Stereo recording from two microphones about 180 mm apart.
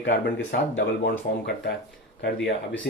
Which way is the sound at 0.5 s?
75° left (ahead or behind).